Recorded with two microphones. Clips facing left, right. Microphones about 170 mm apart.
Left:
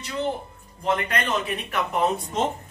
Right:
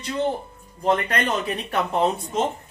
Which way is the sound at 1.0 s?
35° right (ahead or behind).